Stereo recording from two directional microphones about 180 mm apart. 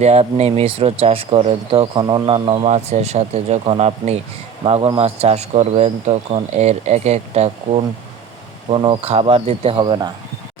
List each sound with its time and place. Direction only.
0.0 s speech: 40° right (ahead or behind)